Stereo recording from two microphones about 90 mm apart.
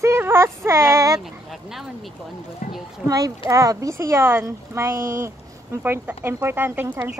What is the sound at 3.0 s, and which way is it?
Speech, 40° right (ahead or behind).